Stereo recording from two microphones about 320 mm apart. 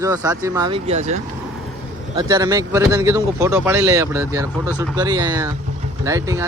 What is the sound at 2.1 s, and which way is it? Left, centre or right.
Speech, centre.